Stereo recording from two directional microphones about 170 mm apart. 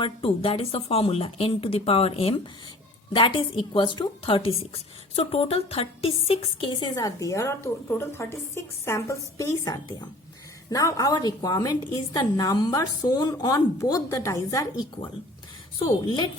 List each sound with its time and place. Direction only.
0.0 s a woman's voice: 30° left (ahead or behind)